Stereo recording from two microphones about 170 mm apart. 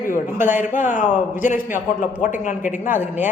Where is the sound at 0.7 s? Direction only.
50° left (ahead or behind).